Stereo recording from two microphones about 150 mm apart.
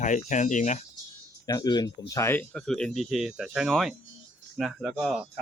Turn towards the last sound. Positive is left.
turn(degrees=-5)  # may be behind; listen again after turning